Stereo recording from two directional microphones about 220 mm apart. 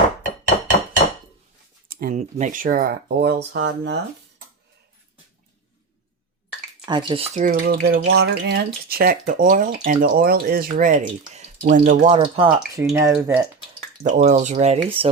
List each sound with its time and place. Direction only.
0.5 s hammer: 30° left (ahead or behind)
1.9 s speech: 40° right (ahead or behind)
6.8 s speech: 20° right (ahead or behind); by 8.0 s 40° right (ahead or behind)
8.0 s a sound: 80° right
8.4 s speech: 45° right (ahead or behind)
12.2 s speech: 20° right (ahead or behind)
14.1 s speech: 35° right (ahead or behind)